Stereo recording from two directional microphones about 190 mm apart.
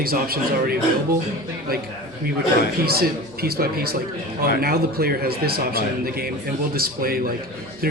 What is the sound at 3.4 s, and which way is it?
A man's voice, 55° right (ahead or behind).